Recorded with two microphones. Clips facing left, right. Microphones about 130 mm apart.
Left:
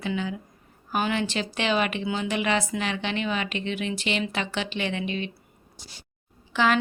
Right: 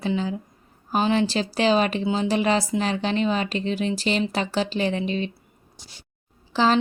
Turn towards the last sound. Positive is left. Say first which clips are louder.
# right 3 dB
turn(degrees=-35)  # may be behind; listen again after turning